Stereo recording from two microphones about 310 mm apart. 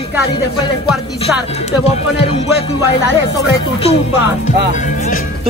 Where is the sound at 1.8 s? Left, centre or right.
Centre.